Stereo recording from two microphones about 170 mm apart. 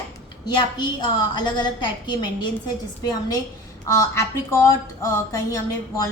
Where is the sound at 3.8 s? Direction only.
15° left (ahead or behind).